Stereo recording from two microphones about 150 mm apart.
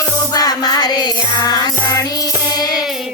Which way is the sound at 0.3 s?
25° left (ahead or behind).